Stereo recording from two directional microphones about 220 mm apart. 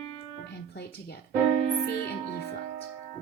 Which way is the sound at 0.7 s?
45° left (ahead or behind).